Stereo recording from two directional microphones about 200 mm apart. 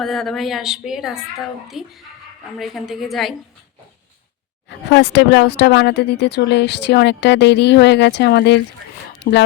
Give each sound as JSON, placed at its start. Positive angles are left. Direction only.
{"t": 0.0, "sound": "a woman's voice", "side_deg": 0}
{"t": 4.9, "sound": "speech", "side_deg": 60}
{"t": 9.1, "sound": "a sound", "side_deg": 60}